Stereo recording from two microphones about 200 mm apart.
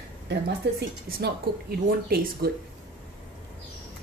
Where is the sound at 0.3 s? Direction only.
55° right (ahead or behind).